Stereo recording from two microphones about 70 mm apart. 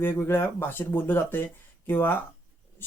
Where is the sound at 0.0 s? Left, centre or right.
Left.